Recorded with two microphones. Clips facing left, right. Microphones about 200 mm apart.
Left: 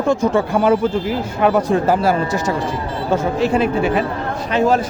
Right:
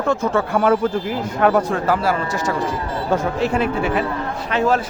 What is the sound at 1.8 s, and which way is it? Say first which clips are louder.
Speech: left 3 dB; 25° left (ahead or behind).